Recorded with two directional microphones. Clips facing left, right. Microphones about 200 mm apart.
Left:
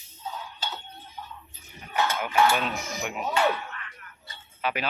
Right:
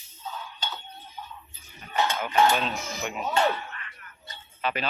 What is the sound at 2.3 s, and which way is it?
Speech, 20° right (ahead or behind).